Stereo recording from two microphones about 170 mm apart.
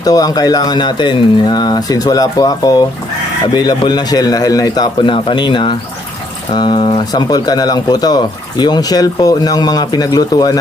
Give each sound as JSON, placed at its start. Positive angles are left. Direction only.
{"t": 0.0, "sound": "speech", "side_deg": 20}